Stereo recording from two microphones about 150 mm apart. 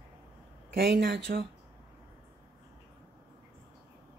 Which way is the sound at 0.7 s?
90° right.